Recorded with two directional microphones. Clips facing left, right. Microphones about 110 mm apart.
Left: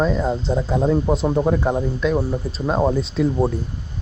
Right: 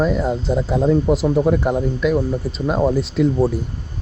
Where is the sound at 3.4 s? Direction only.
25° left (ahead or behind).